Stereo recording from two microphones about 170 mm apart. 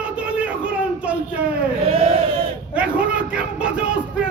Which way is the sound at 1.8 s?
35° right (ahead or behind).